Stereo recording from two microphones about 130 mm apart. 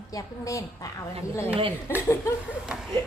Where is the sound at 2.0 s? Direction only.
20° left (ahead or behind).